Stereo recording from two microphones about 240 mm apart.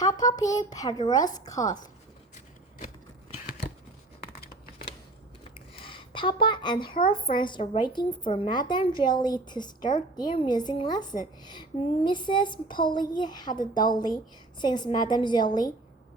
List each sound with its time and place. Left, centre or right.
0.0 s speech: centre
5.5 s a sound: left
7.1 s speech: left